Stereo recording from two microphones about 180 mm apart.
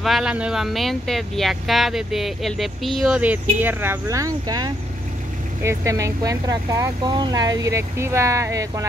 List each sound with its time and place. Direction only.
0.0 s speech: centre (ahead or behind); by 8.8 s 15° right (ahead or behind)